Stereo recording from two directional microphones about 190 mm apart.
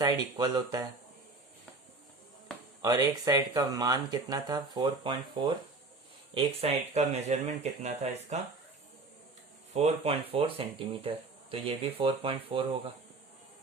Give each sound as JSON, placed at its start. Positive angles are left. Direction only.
{"t": 0.0, "sound": "speech", "side_deg": -20}
{"t": 2.8, "sound": "speech", "side_deg": -20}
{"t": 9.7, "sound": "speech", "side_deg": -35}